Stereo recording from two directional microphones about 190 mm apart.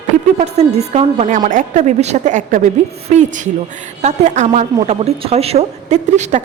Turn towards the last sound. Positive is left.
turn(degrees=-35)  # may be behind; listen again after turning